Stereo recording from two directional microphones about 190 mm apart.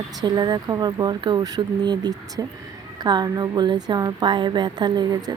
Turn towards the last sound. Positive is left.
turn(degrees=-20)  # may be behind; listen again after turning